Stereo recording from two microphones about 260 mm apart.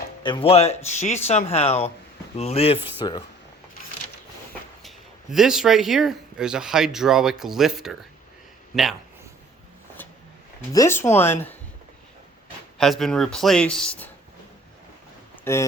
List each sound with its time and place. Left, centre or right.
0.2 s speech: centre
4.8 s speech: centre
10.7 s speech: centre
12.8 s speech: centre
15.5 s speech: centre